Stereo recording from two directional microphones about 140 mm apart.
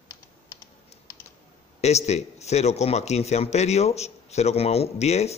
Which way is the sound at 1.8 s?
50° left (ahead or behind).